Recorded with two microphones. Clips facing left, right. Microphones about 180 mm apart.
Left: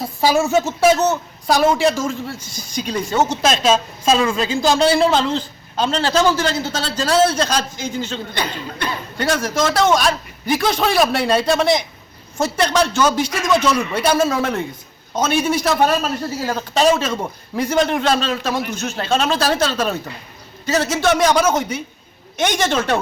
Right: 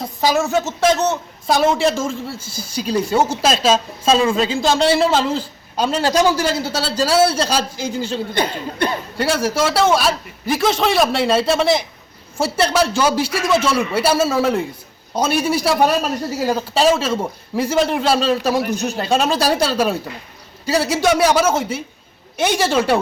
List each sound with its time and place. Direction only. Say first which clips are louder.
0.0 s a man's voice: left 1 dB; 10° left (ahead or behind); by 3.5 s 5° right (ahead or behind)
4.0 s speech: right 2 dB; 30° right (ahead or behind)
4.6 s a man's voice: left 2 dB; centre (ahead or behind)
8.4 s speech: right 5 dB; 50° right (ahead or behind)
9.1 s a man's voice: even; 10° right (ahead or behind)
13.2 s speech: right 2 dB; 30° right (ahead or behind)
13.7 s a man's voice: even; 5° right (ahead or behind)
18.6 s speech: right 4 dB; 35° right (ahead or behind)
18.9 s a man's voice: even; 10° right (ahead or behind)